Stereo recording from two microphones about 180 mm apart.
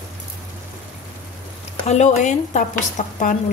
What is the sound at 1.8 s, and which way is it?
Speech, 40° left (ahead or behind).